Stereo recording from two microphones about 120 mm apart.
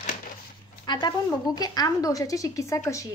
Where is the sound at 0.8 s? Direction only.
35° left (ahead or behind).